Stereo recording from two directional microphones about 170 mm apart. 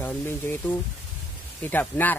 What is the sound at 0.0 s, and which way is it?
Speech, 10° left (ahead or behind).